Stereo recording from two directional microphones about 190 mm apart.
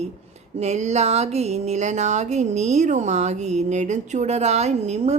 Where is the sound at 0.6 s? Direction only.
35° right (ahead or behind).